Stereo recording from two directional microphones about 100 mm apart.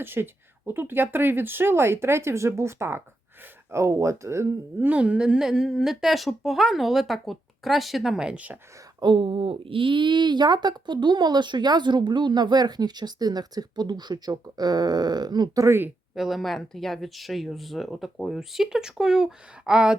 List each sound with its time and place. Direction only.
0.0 s speech: 20° right (ahead or behind)
4.9 s speech: 10° right (ahead or behind)
9.0 s speech: 55° right (ahead or behind)
15.6 s speech: 25° right (ahead or behind)
16.1 s speech: 5° right (ahead or behind)